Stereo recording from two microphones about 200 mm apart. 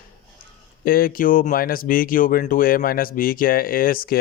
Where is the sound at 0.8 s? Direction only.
45° left (ahead or behind).